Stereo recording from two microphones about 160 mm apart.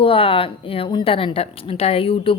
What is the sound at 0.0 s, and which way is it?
A woman's voice, 35° left (ahead or behind).